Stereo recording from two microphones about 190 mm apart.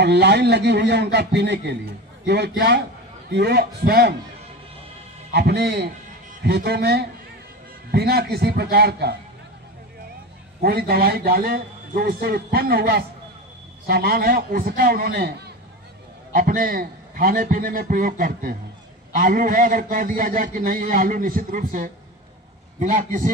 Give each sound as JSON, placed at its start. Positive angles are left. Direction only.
{"t": 0.0, "sound": "a man's voice", "side_deg": -60}
{"t": 5.3, "sound": "a man's voice", "side_deg": -60}
{"t": 10.6, "sound": "a man's voice", "side_deg": -55}